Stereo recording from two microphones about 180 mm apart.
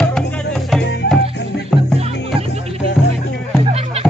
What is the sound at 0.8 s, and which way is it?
Music, 75° left (ahead or behind).